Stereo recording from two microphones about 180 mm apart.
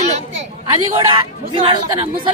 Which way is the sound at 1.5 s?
30° right (ahead or behind).